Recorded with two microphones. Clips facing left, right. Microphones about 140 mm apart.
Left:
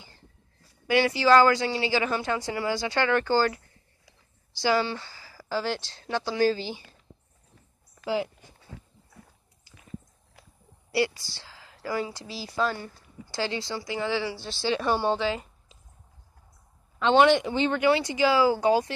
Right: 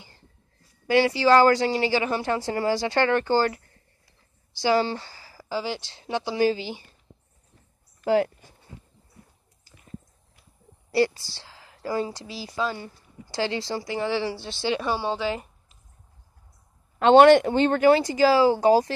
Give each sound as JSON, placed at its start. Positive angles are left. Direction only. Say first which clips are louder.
{"t": 0.8, "sound": "speech", "louder": "right 2 dB", "side_deg": -30}
{"t": 4.8, "sound": "a sound", "louder": "right 3 dB", "side_deg": -30}
{"t": 5.5, "sound": "speech", "louder": "even", "side_deg": -10}
{"t": 8.0, "sound": "speech", "louder": "right 7 dB", "side_deg": -55}
{"t": 11.0, "sound": "speech", "louder": "right 4 dB", "side_deg": -35}
{"t": 14.8, "sound": "a woman's voice", "louder": "left 2 dB", "side_deg": -5}
{"t": 17.0, "sound": "speech", "louder": "right 6 dB", "side_deg": -50}